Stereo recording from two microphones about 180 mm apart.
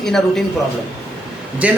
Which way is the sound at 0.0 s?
5° left (ahead or behind).